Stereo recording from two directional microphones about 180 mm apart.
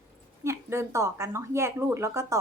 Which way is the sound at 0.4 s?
15° right (ahead or behind).